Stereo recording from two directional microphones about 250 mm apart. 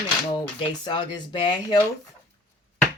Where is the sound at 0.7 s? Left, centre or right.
Centre.